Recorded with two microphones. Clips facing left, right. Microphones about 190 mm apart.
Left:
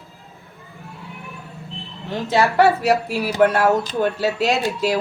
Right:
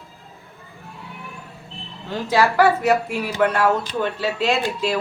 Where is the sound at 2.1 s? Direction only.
20° left (ahead or behind).